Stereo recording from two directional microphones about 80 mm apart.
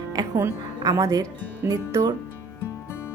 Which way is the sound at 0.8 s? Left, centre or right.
Right.